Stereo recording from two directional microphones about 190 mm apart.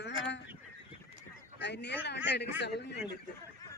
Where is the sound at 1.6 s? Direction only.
65° left (ahead or behind).